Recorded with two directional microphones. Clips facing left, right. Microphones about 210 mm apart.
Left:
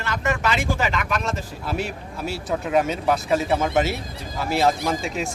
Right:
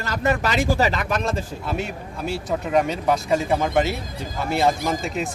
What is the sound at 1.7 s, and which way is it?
Speech, centre (ahead or behind).